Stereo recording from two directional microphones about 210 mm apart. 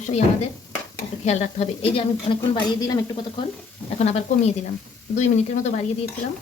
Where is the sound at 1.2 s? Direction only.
30° left (ahead or behind).